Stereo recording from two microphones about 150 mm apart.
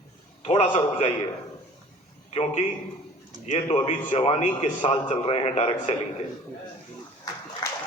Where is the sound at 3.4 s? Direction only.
45° left (ahead or behind).